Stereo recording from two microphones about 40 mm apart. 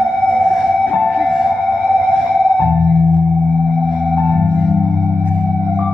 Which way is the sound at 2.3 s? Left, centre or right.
Centre.